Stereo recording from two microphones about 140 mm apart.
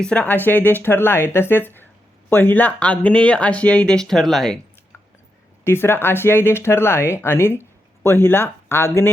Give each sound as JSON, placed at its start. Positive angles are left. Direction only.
{"t": 0.0, "sound": "speech", "side_deg": 10}
{"t": 5.6, "sound": "speech", "side_deg": 15}